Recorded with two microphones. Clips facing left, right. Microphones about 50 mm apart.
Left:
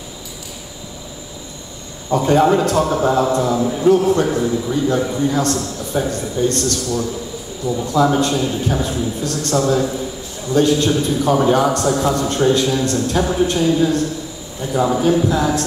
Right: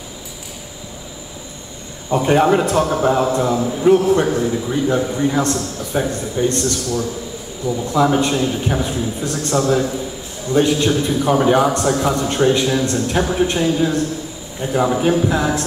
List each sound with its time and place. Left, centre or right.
2.0 s a man's voice: right